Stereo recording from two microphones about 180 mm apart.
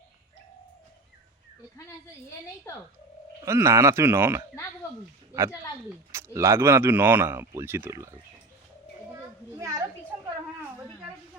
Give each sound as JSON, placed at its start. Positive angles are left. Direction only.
{"t": 3.4, "sound": "speech", "side_deg": -15}
{"t": 6.1, "sound": "speech", "side_deg": -15}
{"t": 9.6, "sound": "speech", "side_deg": -15}